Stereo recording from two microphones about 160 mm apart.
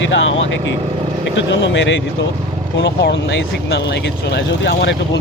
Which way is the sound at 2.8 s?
90° left.